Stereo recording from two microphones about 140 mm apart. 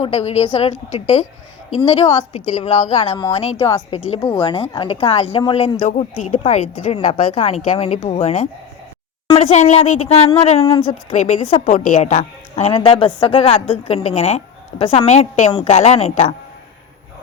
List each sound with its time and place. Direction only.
0.0 s a woman's voice: 50° left (ahead or behind)
1.8 s a woman's voice: 45° left (ahead or behind)
5.9 s a woman's voice: 55° left (ahead or behind)
10.8 s a woman's voice: 60° left (ahead or behind)